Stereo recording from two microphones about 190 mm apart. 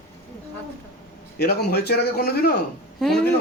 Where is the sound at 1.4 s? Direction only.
55° left (ahead or behind).